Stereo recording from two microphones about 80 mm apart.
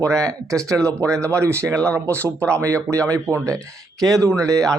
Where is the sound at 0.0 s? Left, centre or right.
Right.